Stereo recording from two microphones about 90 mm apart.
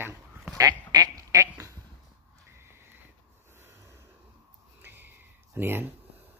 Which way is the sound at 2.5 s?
25° right (ahead or behind).